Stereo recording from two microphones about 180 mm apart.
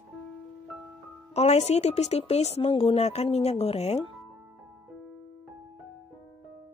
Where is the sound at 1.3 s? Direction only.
35° left (ahead or behind).